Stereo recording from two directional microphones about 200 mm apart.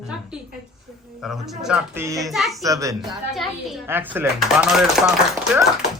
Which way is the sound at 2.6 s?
15° right (ahead or behind).